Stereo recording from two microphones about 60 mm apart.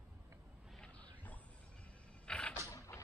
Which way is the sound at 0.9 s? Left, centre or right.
Left.